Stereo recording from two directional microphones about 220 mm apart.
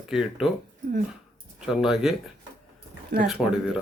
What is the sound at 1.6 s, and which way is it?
Speech, centre (ahead or behind).